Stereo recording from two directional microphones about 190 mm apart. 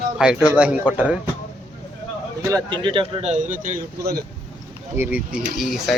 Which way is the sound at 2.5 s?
25° right (ahead or behind).